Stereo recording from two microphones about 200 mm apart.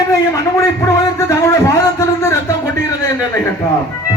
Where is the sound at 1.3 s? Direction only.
15° left (ahead or behind).